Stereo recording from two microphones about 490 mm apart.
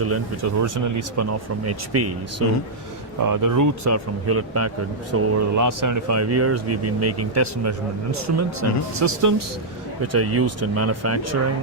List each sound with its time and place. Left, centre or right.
0.0 s speech: right
3.2 s speech: right